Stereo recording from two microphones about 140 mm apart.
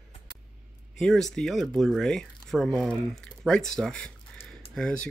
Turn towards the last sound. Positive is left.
turn(degrees=5)  # may be behind; listen again after turning